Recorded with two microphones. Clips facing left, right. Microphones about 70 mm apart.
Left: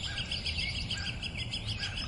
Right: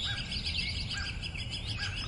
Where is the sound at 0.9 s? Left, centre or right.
Right.